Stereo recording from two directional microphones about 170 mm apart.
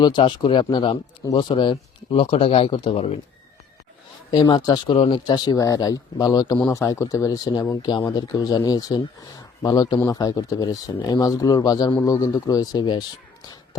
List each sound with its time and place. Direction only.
0.0 s speech: 30° left (ahead or behind)
4.3 s speech: 25° left (ahead or behind)